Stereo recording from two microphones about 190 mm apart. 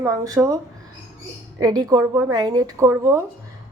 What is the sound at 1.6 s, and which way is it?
A woman's voice, 20° right (ahead or behind).